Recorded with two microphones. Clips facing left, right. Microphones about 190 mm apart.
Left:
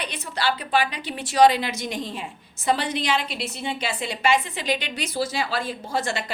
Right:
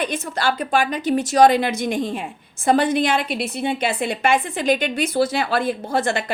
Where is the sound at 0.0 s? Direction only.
45° right (ahead or behind).